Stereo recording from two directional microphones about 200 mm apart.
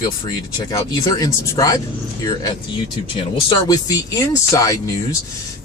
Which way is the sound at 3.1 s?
20° left (ahead or behind).